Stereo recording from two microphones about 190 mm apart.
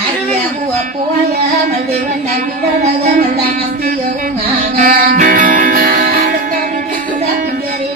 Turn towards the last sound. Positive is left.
turn(degrees=-50)  # may be behind; listen again after turning